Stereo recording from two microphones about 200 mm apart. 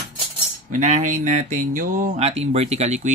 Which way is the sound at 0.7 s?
40° right (ahead or behind).